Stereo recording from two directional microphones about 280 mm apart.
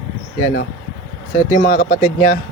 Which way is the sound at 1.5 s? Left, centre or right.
Left.